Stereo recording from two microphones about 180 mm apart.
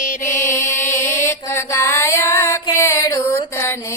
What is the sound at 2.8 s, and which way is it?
Music, 15° left (ahead or behind).